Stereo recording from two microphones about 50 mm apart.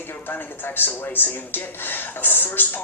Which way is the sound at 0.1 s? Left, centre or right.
Left.